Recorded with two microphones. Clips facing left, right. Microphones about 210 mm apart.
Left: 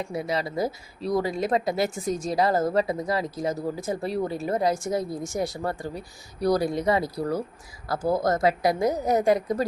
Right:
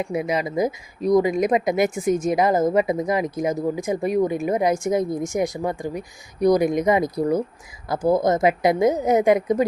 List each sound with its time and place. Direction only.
0.0 s speech: 15° right (ahead or behind)